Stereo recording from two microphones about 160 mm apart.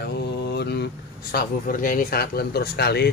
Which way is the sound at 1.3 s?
60° left (ahead or behind).